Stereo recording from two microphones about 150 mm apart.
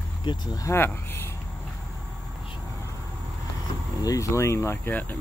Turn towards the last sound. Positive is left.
turn(degrees=15)  # may be behind; listen again after turning